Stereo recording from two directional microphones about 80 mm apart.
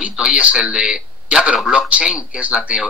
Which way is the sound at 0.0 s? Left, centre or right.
Centre.